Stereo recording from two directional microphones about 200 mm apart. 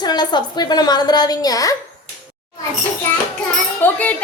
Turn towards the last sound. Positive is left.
turn(degrees=10)  # may be behind; listen again after turning